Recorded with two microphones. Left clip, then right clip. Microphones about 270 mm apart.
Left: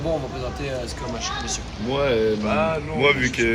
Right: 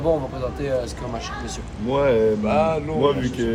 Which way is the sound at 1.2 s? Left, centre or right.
Right.